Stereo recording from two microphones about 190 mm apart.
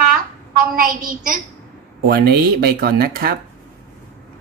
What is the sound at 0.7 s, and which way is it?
Speech, 45° right (ahead or behind).